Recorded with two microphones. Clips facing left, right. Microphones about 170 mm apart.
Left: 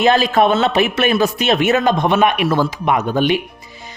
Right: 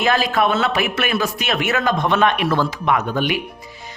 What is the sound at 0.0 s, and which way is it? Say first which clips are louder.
A woman's voice: left 5 dB; 25° left (ahead or behind).